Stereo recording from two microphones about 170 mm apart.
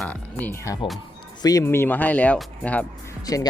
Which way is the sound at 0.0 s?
10° left (ahead or behind).